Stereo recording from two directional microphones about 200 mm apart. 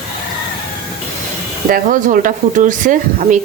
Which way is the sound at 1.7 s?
40° right (ahead or behind).